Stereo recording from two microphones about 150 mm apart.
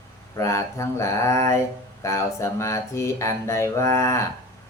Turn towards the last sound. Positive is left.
turn(degrees=20)  # may be behind; listen again after turning